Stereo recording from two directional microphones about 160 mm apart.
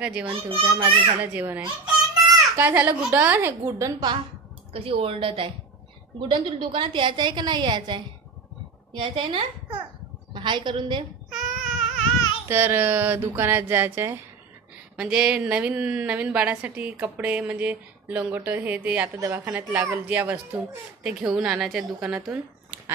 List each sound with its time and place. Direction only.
0.0 s a woman's voice: 5° right (ahead or behind)
0.3 s a child's voice: 35° right (ahead or behind)
1.2 s a woman's voice: 10° right (ahead or behind)
1.6 s a child's voice: 25° right (ahead or behind)
4.7 s a child's voice: 35° right (ahead or behind)
9.0 s a child's voice: 30° right (ahead or behind)
11.2 s baby cry: centre (ahead or behind)
12.4 s a woman's voice: 15° right (ahead or behind)